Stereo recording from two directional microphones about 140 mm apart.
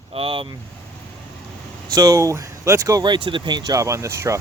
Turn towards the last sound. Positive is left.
turn(degrees=-20)  # may be behind; listen again after turning